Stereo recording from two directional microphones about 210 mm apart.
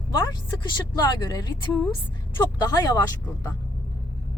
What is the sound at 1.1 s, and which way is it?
Speech, 20° left (ahead or behind).